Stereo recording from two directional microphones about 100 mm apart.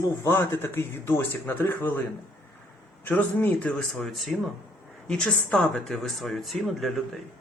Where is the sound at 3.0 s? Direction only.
15° left (ahead or behind).